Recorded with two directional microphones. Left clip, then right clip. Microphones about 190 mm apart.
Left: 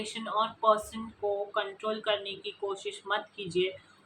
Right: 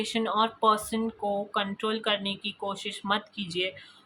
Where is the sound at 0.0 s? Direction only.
60° right (ahead or behind).